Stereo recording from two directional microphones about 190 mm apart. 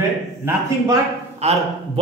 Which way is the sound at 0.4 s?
15° right (ahead or behind).